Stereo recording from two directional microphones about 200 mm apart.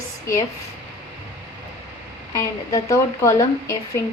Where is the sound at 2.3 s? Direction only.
15° left (ahead or behind).